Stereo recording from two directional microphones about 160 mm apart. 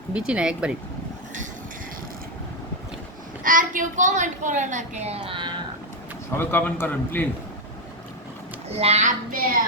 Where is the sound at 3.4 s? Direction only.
55° right (ahead or behind); by 5.5 s 35° right (ahead or behind).